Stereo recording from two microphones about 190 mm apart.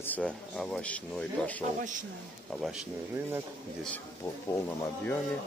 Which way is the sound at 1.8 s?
45° right (ahead or behind).